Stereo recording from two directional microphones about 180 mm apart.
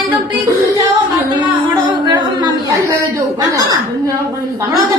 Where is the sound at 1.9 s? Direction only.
25° right (ahead or behind).